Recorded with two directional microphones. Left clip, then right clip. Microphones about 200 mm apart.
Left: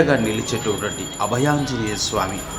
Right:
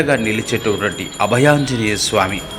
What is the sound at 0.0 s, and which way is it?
A man's voice, 15° right (ahead or behind).